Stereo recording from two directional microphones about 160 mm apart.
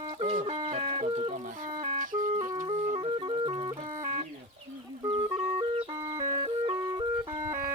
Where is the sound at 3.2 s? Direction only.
30° right (ahead or behind).